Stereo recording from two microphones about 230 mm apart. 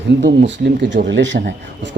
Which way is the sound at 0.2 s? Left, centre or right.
Right.